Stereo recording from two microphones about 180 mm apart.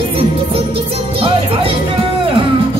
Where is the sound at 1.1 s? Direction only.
30° right (ahead or behind).